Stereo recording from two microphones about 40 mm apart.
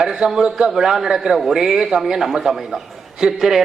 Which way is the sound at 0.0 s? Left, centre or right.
Centre.